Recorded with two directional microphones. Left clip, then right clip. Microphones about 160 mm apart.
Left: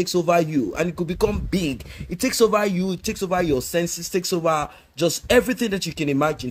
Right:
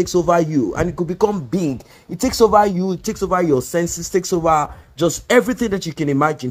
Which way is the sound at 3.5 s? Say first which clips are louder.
Right 4 dB; centre (ahead or behind).